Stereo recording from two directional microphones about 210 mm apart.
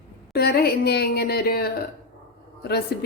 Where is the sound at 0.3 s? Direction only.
50° left (ahead or behind).